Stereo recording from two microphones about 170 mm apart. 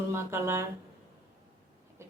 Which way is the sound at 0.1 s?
15° right (ahead or behind).